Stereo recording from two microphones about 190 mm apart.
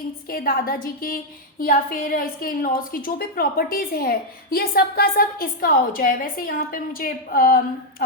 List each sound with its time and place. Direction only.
0.3 s a woman's voice: 50° left (ahead or behind)